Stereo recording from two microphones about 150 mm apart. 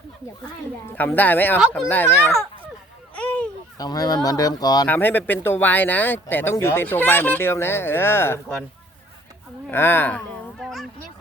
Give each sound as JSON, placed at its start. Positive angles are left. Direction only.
{"t": 0.9, "sound": "speech", "side_deg": 10}
{"t": 3.2, "sound": "a sound", "side_deg": 10}
{"t": 3.8, "sound": "speech", "side_deg": 25}
{"t": 4.9, "sound": "speech", "side_deg": 15}
{"t": 9.6, "sound": "speech", "side_deg": 15}
{"t": 10.6, "sound": "a sound", "side_deg": 0}